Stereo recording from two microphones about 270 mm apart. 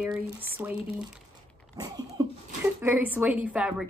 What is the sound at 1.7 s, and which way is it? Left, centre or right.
Speech, centre.